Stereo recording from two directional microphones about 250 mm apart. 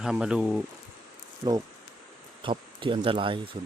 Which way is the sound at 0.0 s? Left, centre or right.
Centre.